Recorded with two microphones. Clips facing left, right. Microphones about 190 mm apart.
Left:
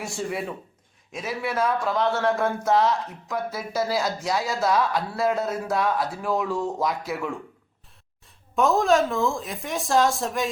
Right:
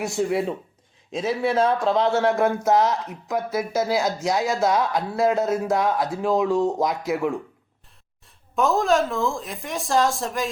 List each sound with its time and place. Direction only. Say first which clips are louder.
0.2 s speech: right 7 dB; 20° right (ahead or behind)
8.5 s a woman's voice: even; centre (ahead or behind)